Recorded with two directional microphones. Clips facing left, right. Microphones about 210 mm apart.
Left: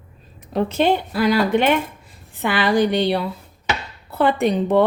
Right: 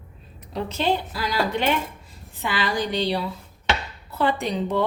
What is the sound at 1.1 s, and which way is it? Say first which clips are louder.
Cutlery: left 8 dB; 60° left (ahead or behind).